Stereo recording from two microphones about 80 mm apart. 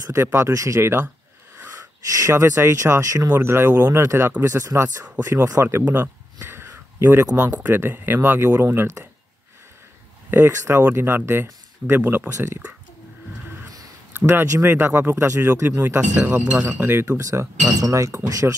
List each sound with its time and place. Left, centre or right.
0.2 s speech: right
0.5 s speech: right
1.7 s speech: right
3.3 s speech: right
6.4 s a sound: right
7.0 s speech: right
10.5 s speech: right
10.8 s speech: right
12.3 s speech: right
14.1 s speech: right
16.0 s speech: right
17.2 s speech: right
18.4 s speech: right